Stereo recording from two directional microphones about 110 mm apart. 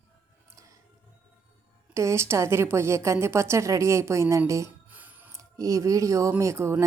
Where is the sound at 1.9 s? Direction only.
25° right (ahead or behind).